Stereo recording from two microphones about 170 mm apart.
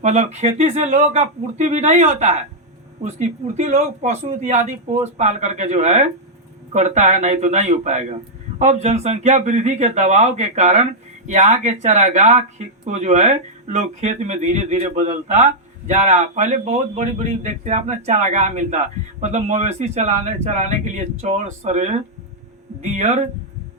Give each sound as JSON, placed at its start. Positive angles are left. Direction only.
{"t": 0.0, "sound": "speech", "side_deg": -40}